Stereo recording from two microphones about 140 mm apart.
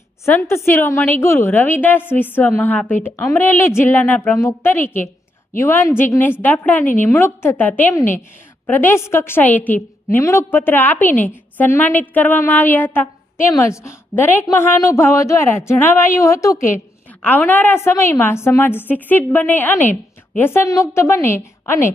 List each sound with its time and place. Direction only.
0.3 s a woman's voice: 15° left (ahead or behind)